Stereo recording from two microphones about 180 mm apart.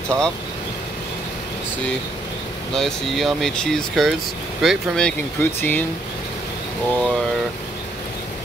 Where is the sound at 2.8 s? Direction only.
Centre (ahead or behind).